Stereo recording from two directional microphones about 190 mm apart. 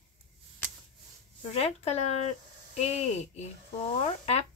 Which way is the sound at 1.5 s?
35° left (ahead or behind).